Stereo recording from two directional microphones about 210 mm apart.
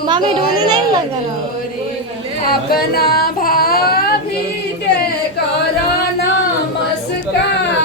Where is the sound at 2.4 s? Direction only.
45° left (ahead or behind).